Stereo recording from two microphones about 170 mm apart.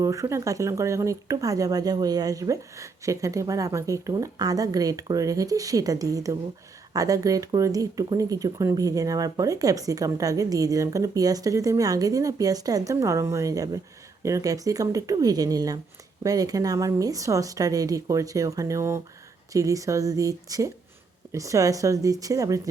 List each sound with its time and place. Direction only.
0.0 s speech: 20° right (ahead or behind)